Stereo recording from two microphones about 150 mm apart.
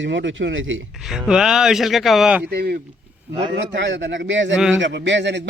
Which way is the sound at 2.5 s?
90° right.